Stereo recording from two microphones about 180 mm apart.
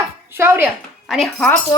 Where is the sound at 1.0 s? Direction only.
Centre (ahead or behind).